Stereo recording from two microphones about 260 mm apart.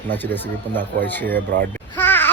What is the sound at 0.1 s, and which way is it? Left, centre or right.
Speech, centre.